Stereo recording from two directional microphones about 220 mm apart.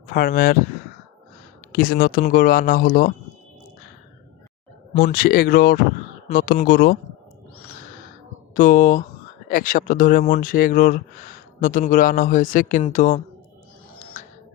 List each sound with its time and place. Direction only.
0.1 s speech: 40° left (ahead or behind)
1.7 s speech: 40° left (ahead or behind)
4.9 s speech: 40° left (ahead or behind)
8.5 s speech: 35° left (ahead or behind)